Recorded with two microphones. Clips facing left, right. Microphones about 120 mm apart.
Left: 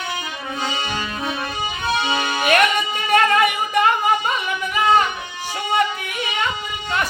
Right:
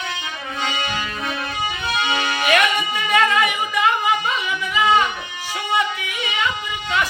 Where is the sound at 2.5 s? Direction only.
45° left (ahead or behind).